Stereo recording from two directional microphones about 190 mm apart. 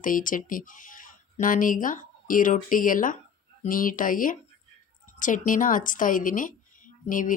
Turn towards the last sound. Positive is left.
turn(degrees=45)  # may be behind; listen again after turning